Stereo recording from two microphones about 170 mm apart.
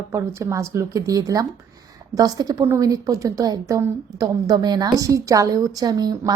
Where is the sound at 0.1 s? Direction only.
15° right (ahead or behind).